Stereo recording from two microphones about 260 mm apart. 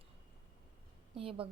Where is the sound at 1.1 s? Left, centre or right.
Right.